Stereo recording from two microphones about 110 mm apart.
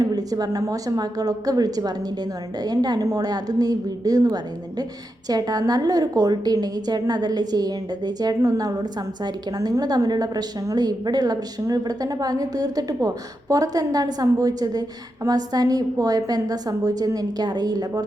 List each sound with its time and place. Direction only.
0.0 s a woman's voice: 35° right (ahead or behind)